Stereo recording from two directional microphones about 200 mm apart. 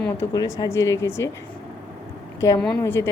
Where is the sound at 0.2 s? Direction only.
15° left (ahead or behind).